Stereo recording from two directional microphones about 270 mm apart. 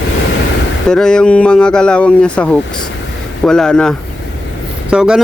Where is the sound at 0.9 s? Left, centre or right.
Centre.